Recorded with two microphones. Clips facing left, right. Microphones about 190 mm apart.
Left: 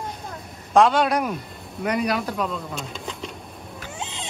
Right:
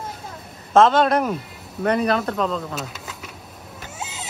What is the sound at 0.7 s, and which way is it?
Speech, 10° left (ahead or behind).